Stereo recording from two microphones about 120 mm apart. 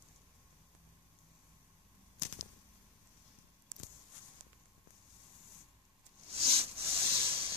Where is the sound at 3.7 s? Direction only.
40° left (ahead or behind).